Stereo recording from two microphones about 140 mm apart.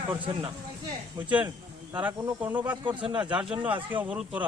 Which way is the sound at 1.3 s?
10° right (ahead or behind).